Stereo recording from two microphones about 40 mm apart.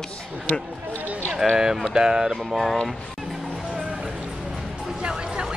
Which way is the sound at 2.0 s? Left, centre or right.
Centre.